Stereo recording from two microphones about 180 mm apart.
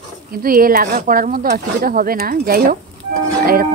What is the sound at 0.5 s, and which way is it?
Speech, 55° right (ahead or behind).